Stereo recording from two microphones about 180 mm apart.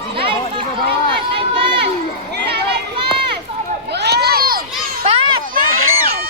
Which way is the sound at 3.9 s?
65° right (ahead or behind).